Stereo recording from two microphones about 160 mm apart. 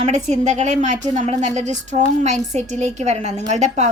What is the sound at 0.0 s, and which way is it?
A woman's voice, 45° right (ahead or behind).